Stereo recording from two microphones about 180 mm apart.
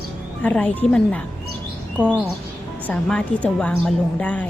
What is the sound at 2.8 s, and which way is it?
A woman's voice, 5° left (ahead or behind).